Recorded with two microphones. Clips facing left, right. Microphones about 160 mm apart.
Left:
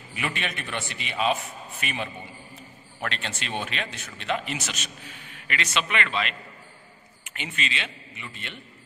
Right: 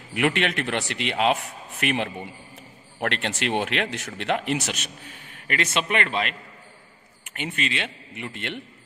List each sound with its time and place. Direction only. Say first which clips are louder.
0.1 s a man's voice: right 9 dB; 70° right (ahead or behind)
5.5 s a man's voice: right 3 dB; 50° right (ahead or behind); by 8.6 s 70° right (ahead or behind)